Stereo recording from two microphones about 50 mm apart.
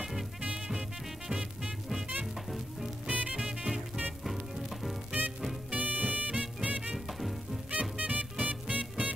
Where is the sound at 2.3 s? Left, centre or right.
Centre.